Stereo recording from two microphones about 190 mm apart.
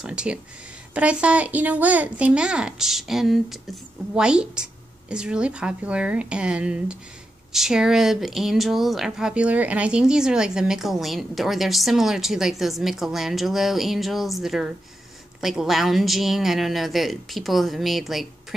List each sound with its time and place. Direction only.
0.0 s speech: 5° right (ahead or behind)